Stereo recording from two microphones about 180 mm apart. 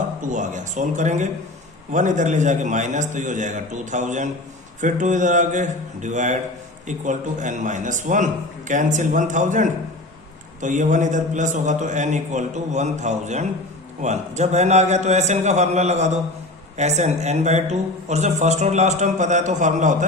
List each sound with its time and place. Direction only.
0.2 s a man's voice: 45° right (ahead or behind)